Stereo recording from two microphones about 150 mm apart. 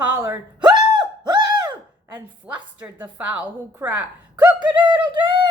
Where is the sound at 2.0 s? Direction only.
10° right (ahead or behind).